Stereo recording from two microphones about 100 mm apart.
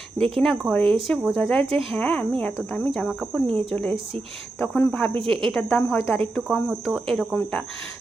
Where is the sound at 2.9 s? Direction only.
5° left (ahead or behind).